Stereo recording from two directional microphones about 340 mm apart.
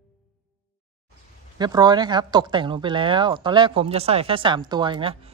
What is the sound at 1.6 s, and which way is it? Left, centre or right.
Speech, centre.